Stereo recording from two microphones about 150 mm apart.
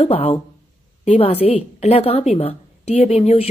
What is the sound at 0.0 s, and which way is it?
A woman's voice, 40° left (ahead or behind).